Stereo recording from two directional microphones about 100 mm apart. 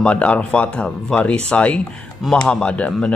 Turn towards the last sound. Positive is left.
turn(degrees=10)  # may be behind; listen again after turning